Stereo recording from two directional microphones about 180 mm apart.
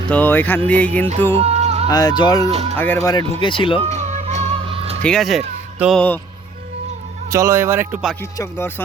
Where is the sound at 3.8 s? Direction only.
40° right (ahead or behind).